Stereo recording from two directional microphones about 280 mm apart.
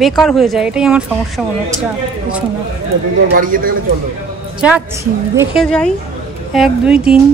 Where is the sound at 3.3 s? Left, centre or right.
Right.